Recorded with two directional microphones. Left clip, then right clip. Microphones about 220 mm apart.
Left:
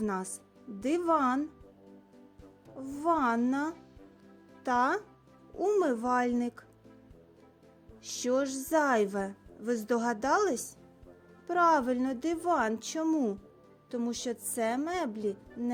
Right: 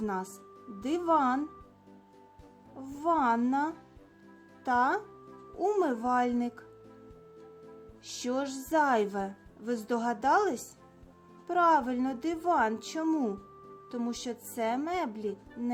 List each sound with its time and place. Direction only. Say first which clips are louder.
0.0 s a woman's voice: even; 30° left (ahead or behind)
2.7 s a woman's voice: right 1 dB; 25° left (ahead or behind)
8.0 s a woman's voice: left 3 dB; 25° left (ahead or behind)